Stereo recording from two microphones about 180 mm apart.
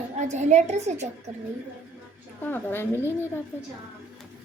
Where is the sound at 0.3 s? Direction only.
40° right (ahead or behind).